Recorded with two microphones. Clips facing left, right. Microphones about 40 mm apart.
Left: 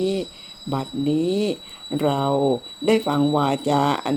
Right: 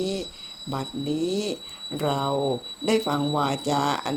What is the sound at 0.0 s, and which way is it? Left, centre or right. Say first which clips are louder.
Speech: left 5 dB; centre.